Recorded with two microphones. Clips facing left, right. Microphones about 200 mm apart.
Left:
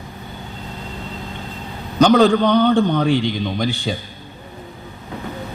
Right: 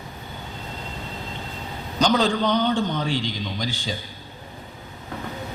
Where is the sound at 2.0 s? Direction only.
60° left (ahead or behind).